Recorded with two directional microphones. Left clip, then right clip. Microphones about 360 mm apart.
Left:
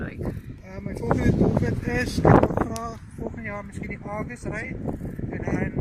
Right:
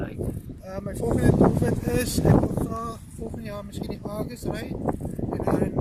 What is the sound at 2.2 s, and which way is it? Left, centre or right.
Speech, left.